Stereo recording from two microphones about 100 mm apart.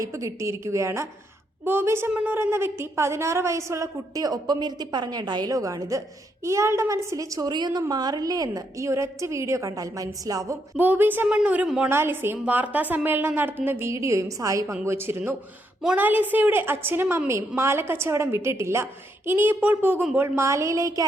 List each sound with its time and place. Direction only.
0.0 s a woman's voice: 30° right (ahead or behind)
10.8 s a woman's voice: 20° right (ahead or behind)
11.9 s a woman's voice: 25° right (ahead or behind)